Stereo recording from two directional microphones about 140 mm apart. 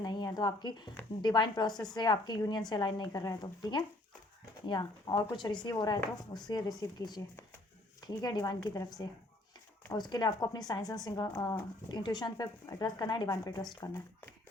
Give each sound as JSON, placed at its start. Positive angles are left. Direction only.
{"t": 0.0, "sound": "a woman's voice", "side_deg": 30}
{"t": 9.9, "sound": "a woman's voice", "side_deg": 30}